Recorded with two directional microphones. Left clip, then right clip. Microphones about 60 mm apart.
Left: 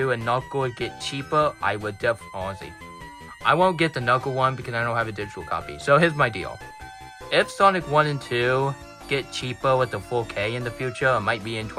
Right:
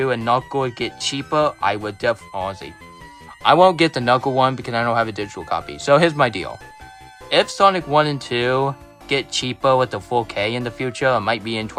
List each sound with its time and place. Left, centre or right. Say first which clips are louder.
0.3 s speech: right 5 dB; right
3.4 s speech: right 7 dB; right
7.3 s speech: right 4 dB; right